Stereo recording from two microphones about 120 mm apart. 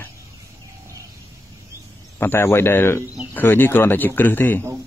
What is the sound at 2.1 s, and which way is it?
Speech, 20° left (ahead or behind).